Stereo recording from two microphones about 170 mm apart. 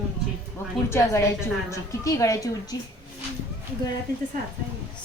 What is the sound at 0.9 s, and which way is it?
A woman's voice, 15° left (ahead or behind).